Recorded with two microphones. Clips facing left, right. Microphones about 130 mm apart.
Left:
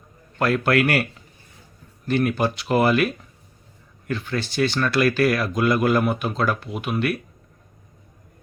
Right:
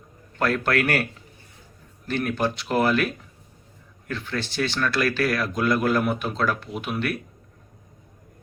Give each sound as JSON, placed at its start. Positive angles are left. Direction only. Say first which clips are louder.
{"t": 0.3, "sound": "speech", "louder": "left 3 dB", "side_deg": 5}
{"t": 2.0, "sound": "speech", "louder": "left 4 dB", "side_deg": 5}
{"t": 4.1, "sound": "speech", "louder": "left 3 dB", "side_deg": 5}